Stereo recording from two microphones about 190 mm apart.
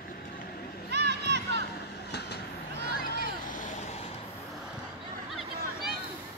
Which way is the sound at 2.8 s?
55° left (ahead or behind).